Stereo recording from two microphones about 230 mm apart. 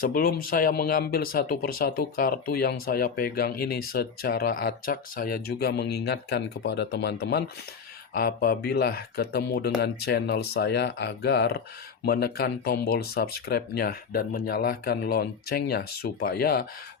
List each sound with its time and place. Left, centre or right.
0.0 s speech: left